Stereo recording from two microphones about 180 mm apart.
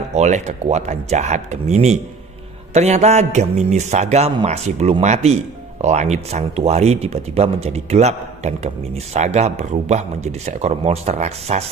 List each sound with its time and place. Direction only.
0.1 s speech: 40° right (ahead or behind)